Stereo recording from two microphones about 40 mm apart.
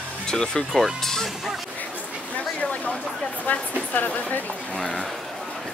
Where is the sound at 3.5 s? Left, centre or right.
Left.